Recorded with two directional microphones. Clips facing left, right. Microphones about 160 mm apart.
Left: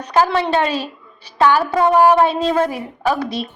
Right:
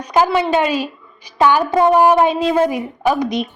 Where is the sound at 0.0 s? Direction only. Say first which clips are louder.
Right 1 dB; 10° right (ahead or behind).